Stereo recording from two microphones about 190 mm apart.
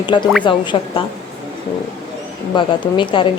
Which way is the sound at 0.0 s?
25° left (ahead or behind).